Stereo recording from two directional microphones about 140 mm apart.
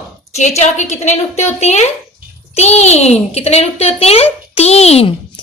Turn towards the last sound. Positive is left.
turn(degrees=40)  # may be behind; listen again after turning